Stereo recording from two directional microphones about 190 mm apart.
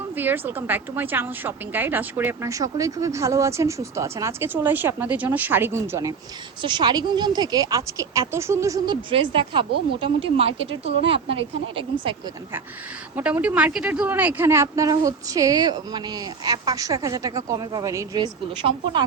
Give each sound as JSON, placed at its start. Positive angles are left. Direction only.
{"t": 0.2, "sound": "a woman's voice", "side_deg": -10}
{"t": 13.1, "sound": "a woman's voice", "side_deg": -10}